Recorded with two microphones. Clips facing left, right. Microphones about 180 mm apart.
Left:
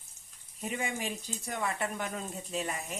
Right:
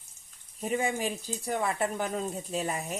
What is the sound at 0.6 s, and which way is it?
Speech, 35° right (ahead or behind).